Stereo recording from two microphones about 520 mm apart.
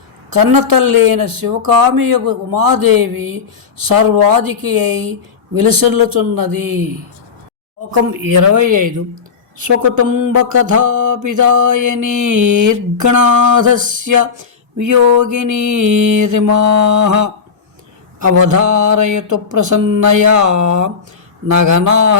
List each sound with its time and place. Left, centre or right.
0.3 s mantra: right
8.1 s mantra: right
18.3 s mantra: right